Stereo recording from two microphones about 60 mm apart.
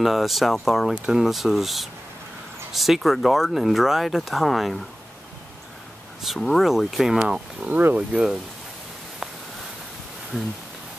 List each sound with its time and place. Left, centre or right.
0.0 s speech: centre
0.9 s speech: centre
1.2 s speech: centre
6.2 s speech: centre
7.2 s speech: centre
7.7 s speech: right
10.3 s speech: centre